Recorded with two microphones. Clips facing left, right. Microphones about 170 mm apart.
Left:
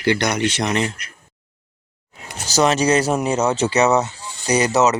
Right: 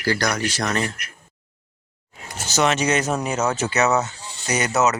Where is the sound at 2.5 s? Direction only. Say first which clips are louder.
Left 4 dB; 35° left (ahead or behind).